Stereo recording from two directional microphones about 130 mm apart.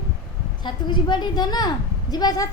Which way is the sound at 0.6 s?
35° left (ahead or behind).